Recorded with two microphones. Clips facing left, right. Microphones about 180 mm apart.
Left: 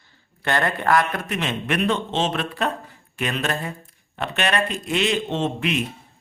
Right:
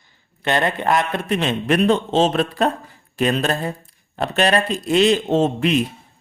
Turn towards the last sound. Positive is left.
turn(degrees=-35)  # may be behind; listen again after turning